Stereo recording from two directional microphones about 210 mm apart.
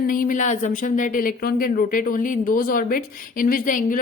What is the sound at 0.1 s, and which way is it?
Speech, 40° left (ahead or behind).